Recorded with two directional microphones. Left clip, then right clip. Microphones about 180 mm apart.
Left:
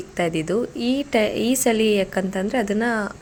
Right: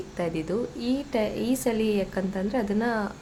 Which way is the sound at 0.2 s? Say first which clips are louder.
Left 6 dB; 20° left (ahead or behind).